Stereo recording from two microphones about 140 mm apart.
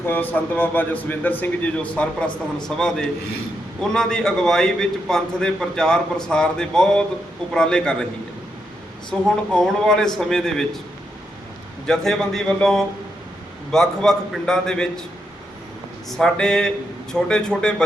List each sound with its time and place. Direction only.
0.0 s a man's voice: 15° left (ahead or behind)
9.0 s a man's voice: 5° left (ahead or behind)
11.9 s a man's voice: 5° left (ahead or behind)
16.0 s a man's voice: 5° left (ahead or behind)